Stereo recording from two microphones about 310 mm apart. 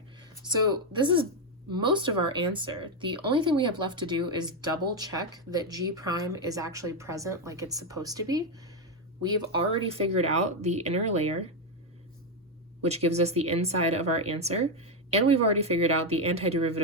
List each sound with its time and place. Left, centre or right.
0.9 s speech: centre
12.8 s speech: right